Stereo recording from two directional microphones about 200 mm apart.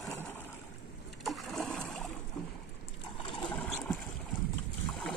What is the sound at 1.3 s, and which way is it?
Splash, centre (ahead or behind).